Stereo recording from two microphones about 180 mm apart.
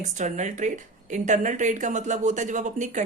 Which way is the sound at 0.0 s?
40° right (ahead or behind).